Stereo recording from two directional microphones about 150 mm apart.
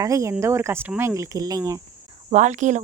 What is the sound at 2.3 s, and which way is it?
Speech, 55° right (ahead or behind).